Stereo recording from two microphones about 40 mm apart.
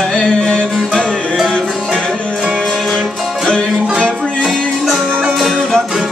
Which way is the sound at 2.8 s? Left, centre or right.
Centre.